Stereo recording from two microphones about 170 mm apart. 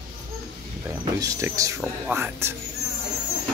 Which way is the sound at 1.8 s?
5° right (ahead or behind).